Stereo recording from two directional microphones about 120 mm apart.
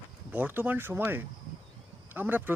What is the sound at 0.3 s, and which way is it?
A man's voice, 15° right (ahead or behind).